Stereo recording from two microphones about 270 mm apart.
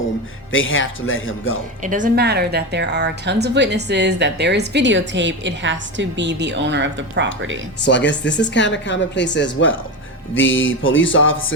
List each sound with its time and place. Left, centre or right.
0.5 s music: left
1.8 s a woman's voice: right
7.9 s speech: left
10.3 s music: left